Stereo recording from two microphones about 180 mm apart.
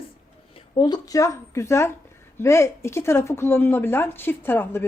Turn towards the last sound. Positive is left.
turn(degrees=10)  # may be behind; listen again after turning